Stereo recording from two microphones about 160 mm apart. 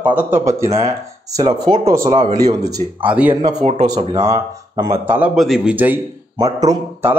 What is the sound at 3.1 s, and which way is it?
Speech, 10° right (ahead or behind).